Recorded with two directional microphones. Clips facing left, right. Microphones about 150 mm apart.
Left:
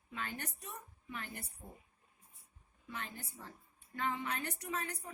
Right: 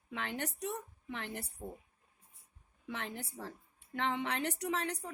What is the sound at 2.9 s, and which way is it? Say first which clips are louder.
A woman's voice: right 5 dB; 75° right (ahead or behind).